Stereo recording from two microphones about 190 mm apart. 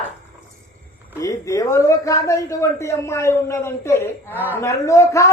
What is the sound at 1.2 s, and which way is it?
A man's voice, 15° left (ahead or behind).